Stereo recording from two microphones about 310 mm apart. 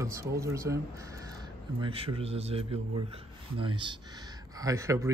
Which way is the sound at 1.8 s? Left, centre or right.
Centre.